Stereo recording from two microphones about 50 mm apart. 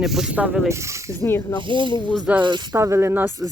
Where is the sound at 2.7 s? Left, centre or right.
Right.